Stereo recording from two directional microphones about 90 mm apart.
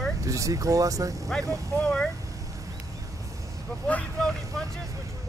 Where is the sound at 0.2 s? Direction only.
35° right (ahead or behind).